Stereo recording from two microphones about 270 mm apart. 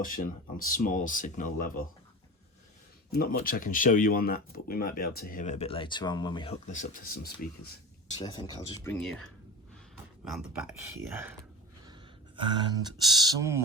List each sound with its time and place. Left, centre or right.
0.0 s speech: left
3.1 s speech: left
8.2 s speech: centre
12.4 s speech: centre